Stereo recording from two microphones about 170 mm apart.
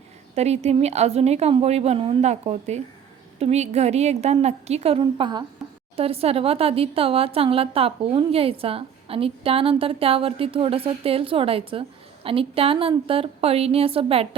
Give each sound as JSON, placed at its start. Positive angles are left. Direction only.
{"t": 0.3, "sound": "speech", "side_deg": -40}